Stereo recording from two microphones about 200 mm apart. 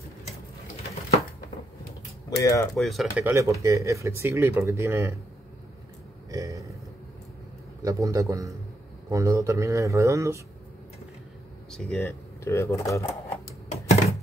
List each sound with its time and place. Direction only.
2.2 s speech: 15° left (ahead or behind)
2.7 s speech: centre (ahead or behind)
3.3 s speech: 15° right (ahead or behind)
6.3 s speech: 15° right (ahead or behind)
7.8 s speech: 15° right (ahead or behind)
11.7 s speech: 5° left (ahead or behind)
12.0 s speech: 15° left (ahead or behind)